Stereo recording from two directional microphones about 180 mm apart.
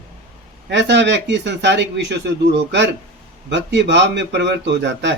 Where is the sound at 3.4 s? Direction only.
80° right.